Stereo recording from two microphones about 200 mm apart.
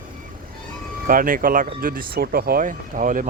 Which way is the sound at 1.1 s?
45° right (ahead or behind).